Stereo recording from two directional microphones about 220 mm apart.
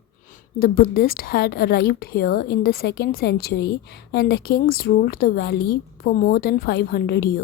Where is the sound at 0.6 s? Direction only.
45° left (ahead or behind).